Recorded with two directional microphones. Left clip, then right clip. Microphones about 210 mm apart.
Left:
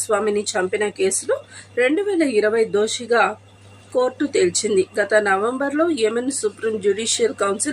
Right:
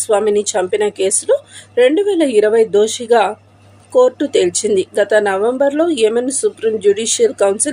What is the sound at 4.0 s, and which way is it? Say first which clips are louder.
Speech: right 7 dB; 15° right (ahead or behind).